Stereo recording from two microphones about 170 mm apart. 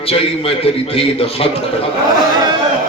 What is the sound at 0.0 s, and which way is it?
A man's voice, 35° left (ahead or behind).